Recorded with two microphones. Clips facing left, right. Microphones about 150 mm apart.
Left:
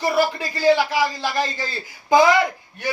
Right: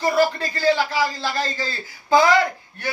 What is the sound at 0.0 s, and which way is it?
A man's voice, 15° left (ahead or behind).